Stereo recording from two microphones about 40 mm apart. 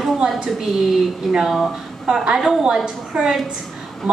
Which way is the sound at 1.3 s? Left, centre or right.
Centre.